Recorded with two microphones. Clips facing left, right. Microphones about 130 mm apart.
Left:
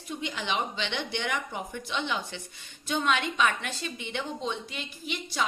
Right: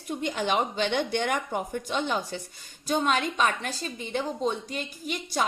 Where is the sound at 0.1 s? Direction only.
45° right (ahead or behind).